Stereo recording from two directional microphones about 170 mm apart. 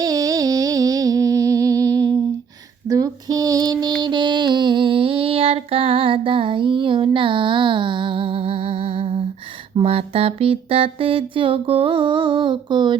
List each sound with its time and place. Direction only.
0.0 s music: 20° right (ahead or behind)
2.9 s female singing: 20° right (ahead or behind)
4.0 s child singing: 25° right (ahead or behind)
9.7 s music: 35° right (ahead or behind)